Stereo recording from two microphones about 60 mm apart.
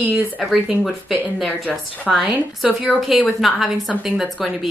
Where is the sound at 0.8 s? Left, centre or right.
Centre.